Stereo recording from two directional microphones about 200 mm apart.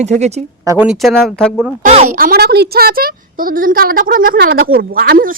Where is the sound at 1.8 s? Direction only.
35° right (ahead or behind).